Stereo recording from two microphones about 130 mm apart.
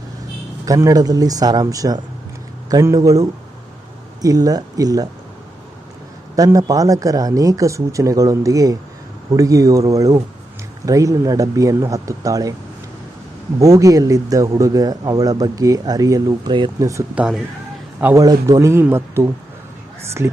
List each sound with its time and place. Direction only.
0.6 s speech: 25° right (ahead or behind)
6.3 s speech: 25° right (ahead or behind)
13.6 s speech: 25° right (ahead or behind)
17.2 s speech: 5° right (ahead or behind)
18.0 s speech: 25° right (ahead or behind)